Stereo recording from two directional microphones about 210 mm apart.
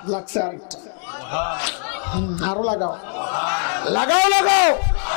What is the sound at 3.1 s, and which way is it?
Speech, 15° left (ahead or behind).